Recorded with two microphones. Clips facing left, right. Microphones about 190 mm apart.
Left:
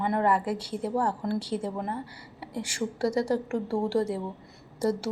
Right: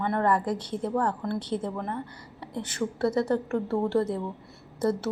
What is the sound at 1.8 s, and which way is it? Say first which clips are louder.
Speech: even; 30° left (ahead or behind).